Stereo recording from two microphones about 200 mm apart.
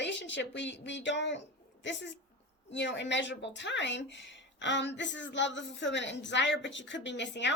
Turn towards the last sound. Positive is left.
turn(degrees=65)  # may be behind; listen again after turning